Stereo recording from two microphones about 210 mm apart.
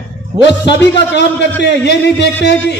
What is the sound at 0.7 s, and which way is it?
A man's voice, 55° left (ahead or behind).